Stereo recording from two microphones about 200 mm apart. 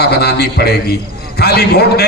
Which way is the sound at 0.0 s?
55° left (ahead or behind).